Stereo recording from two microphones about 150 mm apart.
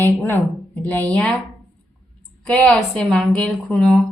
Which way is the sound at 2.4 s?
5° left (ahead or behind).